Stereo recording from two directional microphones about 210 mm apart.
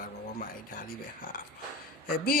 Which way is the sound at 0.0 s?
40° left (ahead or behind).